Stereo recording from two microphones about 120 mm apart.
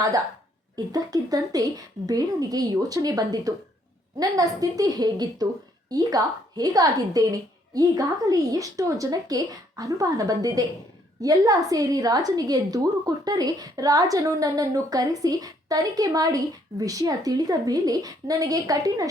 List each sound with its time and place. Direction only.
0.9 s a woman's voice: 30° right (ahead or behind)